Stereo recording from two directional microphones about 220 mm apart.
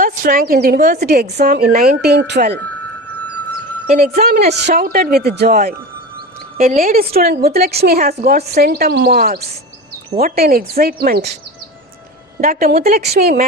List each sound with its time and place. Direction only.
0.0 s a woman's voice: 40° right (ahead or behind)
3.2 s music: 90° right
4.7 s a woman's voice: 40° right (ahead or behind)
12.4 s a woman's voice: 40° right (ahead or behind)